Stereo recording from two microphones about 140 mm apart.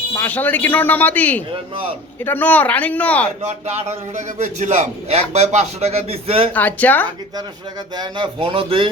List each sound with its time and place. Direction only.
0.1 s speech: 15° left (ahead or behind)
3.7 s a man's voice: 50° right (ahead or behind)
6.5 s speech: 10° left (ahead or behind)
7.9 s speech: 40° right (ahead or behind)